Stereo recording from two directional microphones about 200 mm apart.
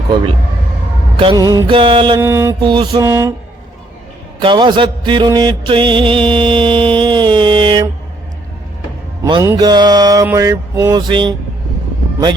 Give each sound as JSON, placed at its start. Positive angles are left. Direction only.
{"t": 1.2, "sound": "music", "side_deg": -20}
{"t": 2.2, "sound": "mantra", "side_deg": -10}
{"t": 2.6, "sound": "music", "side_deg": -25}
{"t": 4.4, "sound": "music", "side_deg": -25}
{"t": 9.2, "sound": "music", "side_deg": -20}
{"t": 10.2, "sound": "mantra", "side_deg": -15}